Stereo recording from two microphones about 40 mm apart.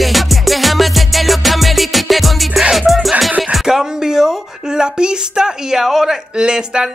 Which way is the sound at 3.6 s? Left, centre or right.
Centre.